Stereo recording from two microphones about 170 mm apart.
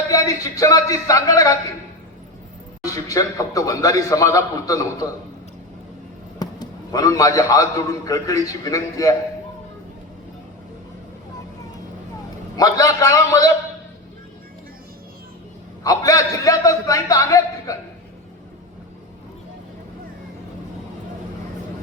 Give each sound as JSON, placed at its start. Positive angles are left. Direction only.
{"t": 0.1, "sound": "a man's voice", "side_deg": 20}
{"t": 2.8, "sound": "a man's voice", "side_deg": 20}
{"t": 6.4, "sound": "a man's voice", "side_deg": 20}
{"t": 12.5, "sound": "a man's voice", "side_deg": 20}
{"t": 15.8, "sound": "a man's voice", "side_deg": 20}